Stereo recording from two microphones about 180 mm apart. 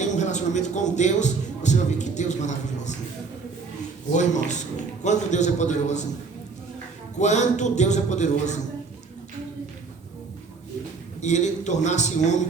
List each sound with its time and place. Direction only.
0.0 s a man's voice: 40° left (ahead or behind)
4.1 s a man's voice: 40° left (ahead or behind)
7.2 s a man's voice: 40° left (ahead or behind)
11.2 s a man's voice: 40° left (ahead or behind)